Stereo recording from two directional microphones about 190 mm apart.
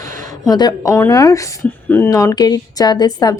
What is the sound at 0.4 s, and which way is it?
A woman's voice, 20° left (ahead or behind).